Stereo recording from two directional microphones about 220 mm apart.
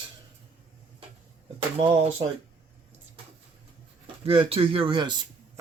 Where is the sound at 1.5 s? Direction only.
25° right (ahead or behind).